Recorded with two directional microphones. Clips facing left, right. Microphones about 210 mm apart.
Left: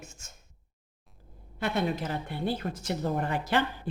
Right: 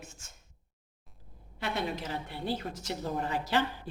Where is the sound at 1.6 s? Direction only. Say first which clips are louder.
Left 5 dB; 50° left (ahead or behind).